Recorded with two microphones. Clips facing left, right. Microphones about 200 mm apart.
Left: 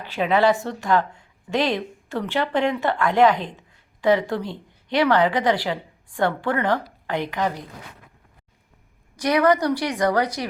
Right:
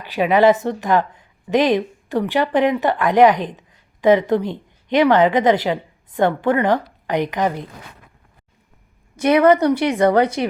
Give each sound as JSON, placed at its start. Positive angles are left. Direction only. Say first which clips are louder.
{"t": 0.0, "sound": "a woman's voice", "louder": "right 5 dB", "side_deg": -15}
{"t": 9.1, "sound": "a woman's voice", "louder": "right 5 dB", "side_deg": -25}